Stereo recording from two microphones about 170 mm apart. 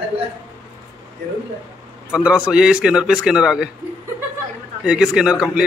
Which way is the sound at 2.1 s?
5° right (ahead or behind).